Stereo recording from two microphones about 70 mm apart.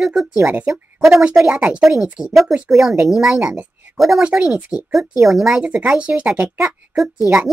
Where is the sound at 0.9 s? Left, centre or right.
Centre.